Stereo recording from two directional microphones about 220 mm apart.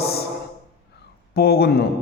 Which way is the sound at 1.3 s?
45° left (ahead or behind).